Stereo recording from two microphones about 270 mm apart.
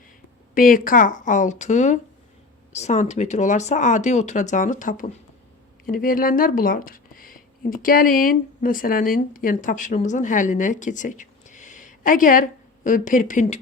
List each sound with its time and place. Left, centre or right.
0.5 s speech: left